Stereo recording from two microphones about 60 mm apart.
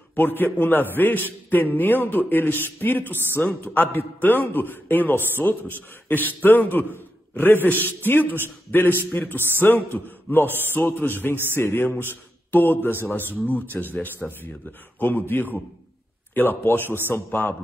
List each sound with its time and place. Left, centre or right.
0.1 s a man's voice: left
14.2 s speech: centre
15.0 s a man's voice: left